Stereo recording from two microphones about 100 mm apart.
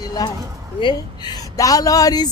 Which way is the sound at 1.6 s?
35° left (ahead or behind).